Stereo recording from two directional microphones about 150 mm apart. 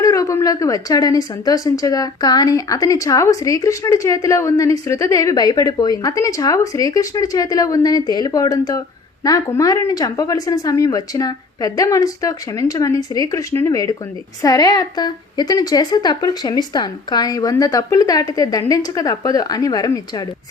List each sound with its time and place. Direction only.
0.0 s a woman's voice: 20° left (ahead or behind)